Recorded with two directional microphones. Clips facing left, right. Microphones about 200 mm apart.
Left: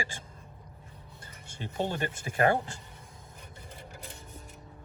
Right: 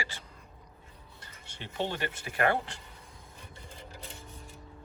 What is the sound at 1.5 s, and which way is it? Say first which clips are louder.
Speech: left 2 dB; 45° left (ahead or behind).